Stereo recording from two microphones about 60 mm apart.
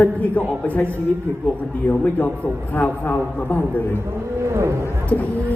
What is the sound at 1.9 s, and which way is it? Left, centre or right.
Speech, left.